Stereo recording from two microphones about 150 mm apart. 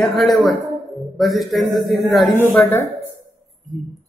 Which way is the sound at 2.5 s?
15° left (ahead or behind).